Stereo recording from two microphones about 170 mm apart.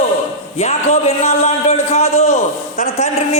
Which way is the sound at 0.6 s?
40° left (ahead or behind).